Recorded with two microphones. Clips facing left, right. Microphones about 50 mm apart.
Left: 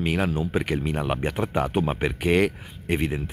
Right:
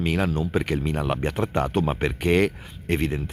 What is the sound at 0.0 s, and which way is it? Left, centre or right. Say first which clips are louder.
Speech: even; centre.